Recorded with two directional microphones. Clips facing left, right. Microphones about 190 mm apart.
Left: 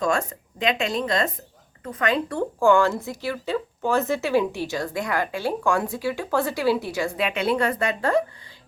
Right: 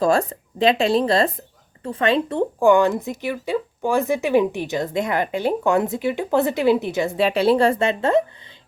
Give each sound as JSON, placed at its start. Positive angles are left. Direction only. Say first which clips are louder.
{"t": 0.0, "sound": "speech", "louder": "right 5 dB", "side_deg": -35}